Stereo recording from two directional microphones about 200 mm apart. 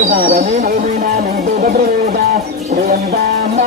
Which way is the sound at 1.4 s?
50° right (ahead or behind).